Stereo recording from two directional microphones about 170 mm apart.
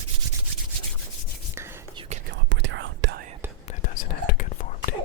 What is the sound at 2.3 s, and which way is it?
Whispering, 90° right.